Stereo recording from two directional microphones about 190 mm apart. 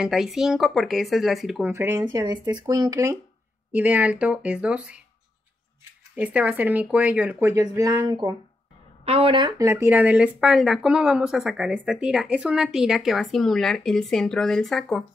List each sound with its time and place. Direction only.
0.0 s speech: centre (ahead or behind)
1.7 s speech: 15° right (ahead or behind)
2.0 s speech: 25° right (ahead or behind); by 5.0 s 5° right (ahead or behind)
6.1 s speech: 5° right (ahead or behind)